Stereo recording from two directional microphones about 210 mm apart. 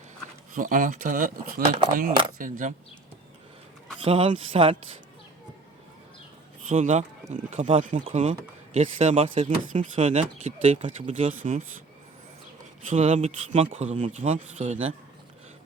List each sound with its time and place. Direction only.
0.5 s speech: 40° right (ahead or behind)
4.0 s speech: 25° right (ahead or behind)
6.7 s speech: 35° right (ahead or behind)
12.9 s speech: 30° right (ahead or behind)